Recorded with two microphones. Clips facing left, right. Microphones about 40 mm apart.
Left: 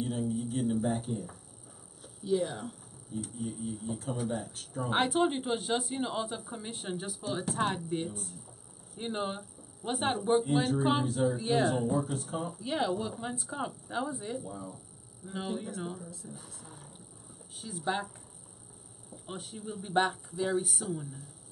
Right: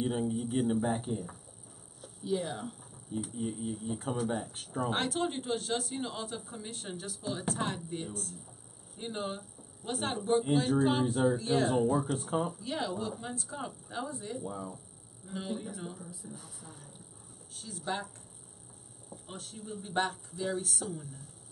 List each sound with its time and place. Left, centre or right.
0.0 s a sound: right
0.8 s speech: centre
3.3 s speech: centre
4.8 s speech: centre
11.1 s speech: centre
11.3 s speech: centre
11.7 s speech: centre
12.5 s speech: centre
16.0 s speech: centre
17.6 s speech: centre
19.2 s speech: centre